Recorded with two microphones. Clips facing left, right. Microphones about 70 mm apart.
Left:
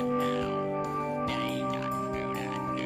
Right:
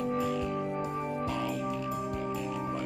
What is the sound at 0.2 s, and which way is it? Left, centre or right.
Music, left.